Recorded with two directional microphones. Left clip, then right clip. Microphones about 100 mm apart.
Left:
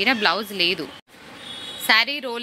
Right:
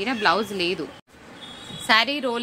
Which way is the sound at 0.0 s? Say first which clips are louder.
Left 2 dB; 20° left (ahead or behind).